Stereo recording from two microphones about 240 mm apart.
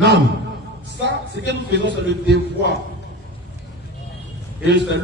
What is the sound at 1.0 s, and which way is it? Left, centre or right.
A man's voice, right.